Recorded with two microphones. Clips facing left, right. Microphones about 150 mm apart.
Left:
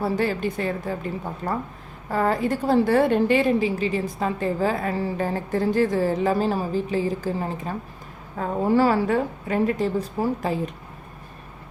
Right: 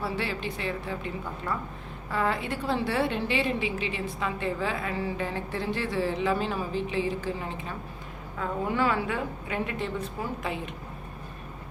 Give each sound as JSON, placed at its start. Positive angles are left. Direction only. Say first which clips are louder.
{"t": 0.0, "sound": "a woman's voice", "louder": "left 8 dB", "side_deg": 45}